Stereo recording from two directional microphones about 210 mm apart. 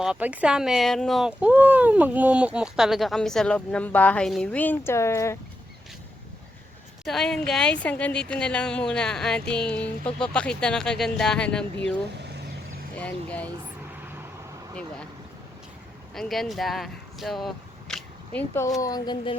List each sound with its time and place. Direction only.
0.0 s speech: 5° right (ahead or behind); by 5.4 s 15° left (ahead or behind)
7.0 s speech: centre (ahead or behind)
13.0 s speech: 5° left (ahead or behind)
16.1 s speech: centre (ahead or behind)
18.3 s speech: 10° left (ahead or behind)